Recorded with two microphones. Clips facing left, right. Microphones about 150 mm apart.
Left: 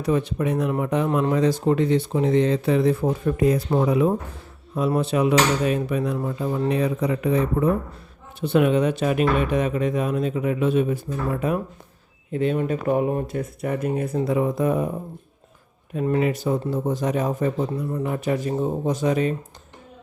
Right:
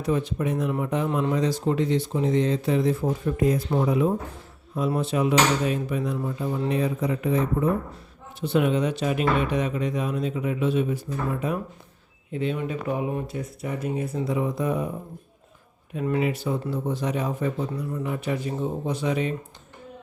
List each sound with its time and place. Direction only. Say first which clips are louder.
0.0 s speech: left 3 dB; 65° left (ahead or behind)
8.4 s speech: left 4 dB; 60° left (ahead or behind)
16.0 s speech: left 3 dB; 40° left (ahead or behind)